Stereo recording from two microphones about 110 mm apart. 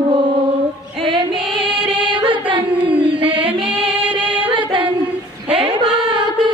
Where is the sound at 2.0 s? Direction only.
50° right (ahead or behind).